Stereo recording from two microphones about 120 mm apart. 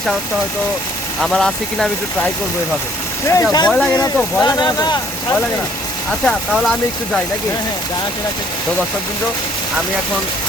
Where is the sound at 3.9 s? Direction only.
30° left (ahead or behind).